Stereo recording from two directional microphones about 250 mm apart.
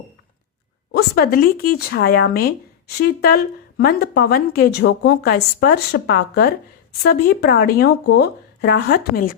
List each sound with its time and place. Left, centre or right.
0.9 s speech: left